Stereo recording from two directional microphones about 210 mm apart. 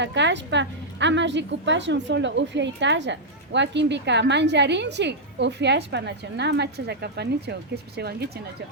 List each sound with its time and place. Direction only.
0.0 s a woman's voice: 55° right (ahead or behind)